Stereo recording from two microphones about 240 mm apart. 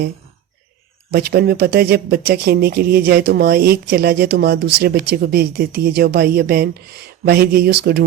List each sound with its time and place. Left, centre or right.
1.1 s speech: right